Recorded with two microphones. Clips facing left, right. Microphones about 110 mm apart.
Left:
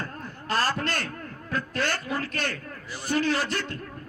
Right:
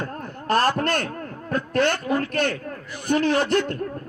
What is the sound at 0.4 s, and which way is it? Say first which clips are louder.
Speech: right 7 dB; 55° right (ahead or behind).